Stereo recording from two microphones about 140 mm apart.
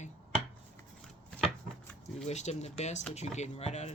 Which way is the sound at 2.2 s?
55° left (ahead or behind).